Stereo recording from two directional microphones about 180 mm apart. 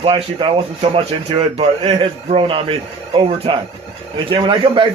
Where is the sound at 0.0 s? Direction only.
30° right (ahead or behind).